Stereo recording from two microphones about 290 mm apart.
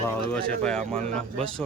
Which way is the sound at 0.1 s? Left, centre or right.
Centre.